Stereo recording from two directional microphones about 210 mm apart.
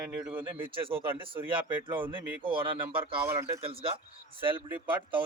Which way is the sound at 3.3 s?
15° right (ahead or behind).